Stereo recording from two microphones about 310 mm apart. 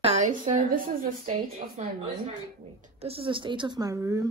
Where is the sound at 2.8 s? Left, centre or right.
Centre.